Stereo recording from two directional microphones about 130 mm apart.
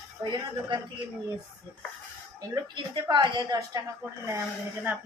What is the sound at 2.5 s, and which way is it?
A woman's voice, 35° right (ahead or behind).